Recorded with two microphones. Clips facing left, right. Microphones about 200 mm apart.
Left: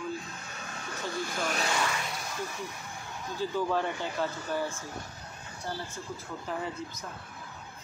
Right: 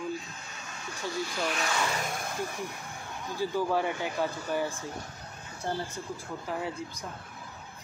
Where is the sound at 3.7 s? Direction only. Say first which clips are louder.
Right 1 dB; 10° right (ahead or behind).